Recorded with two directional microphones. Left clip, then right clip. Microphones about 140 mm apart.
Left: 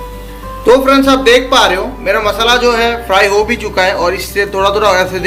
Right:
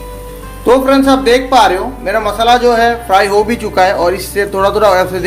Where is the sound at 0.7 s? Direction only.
40° right (ahead or behind).